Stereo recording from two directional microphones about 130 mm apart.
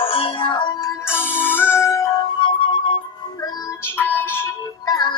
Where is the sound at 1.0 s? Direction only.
15° left (ahead or behind); by 3.0 s 40° left (ahead or behind).